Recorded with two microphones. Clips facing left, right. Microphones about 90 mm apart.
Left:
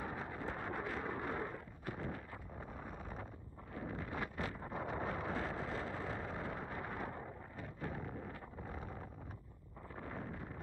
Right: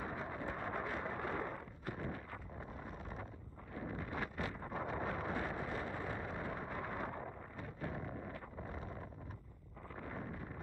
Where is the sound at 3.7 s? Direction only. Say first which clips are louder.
Even; 5° right (ahead or behind).